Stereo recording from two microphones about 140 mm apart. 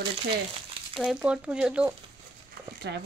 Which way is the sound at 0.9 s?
5° right (ahead or behind).